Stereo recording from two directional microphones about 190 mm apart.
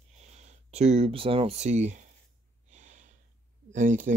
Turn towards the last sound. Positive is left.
turn(degrees=-45)  # may be behind; listen again after turning